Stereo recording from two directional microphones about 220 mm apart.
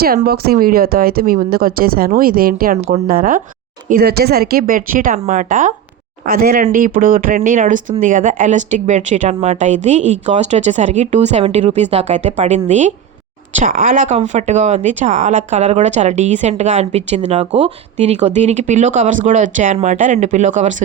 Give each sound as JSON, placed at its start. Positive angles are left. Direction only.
{"t": 0.0, "sound": "speech", "side_deg": -45}